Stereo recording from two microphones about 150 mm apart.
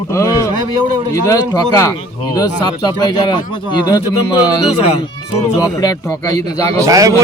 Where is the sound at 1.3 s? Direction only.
20° left (ahead or behind).